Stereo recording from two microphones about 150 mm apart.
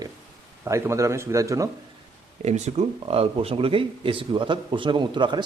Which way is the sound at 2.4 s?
50° right (ahead or behind).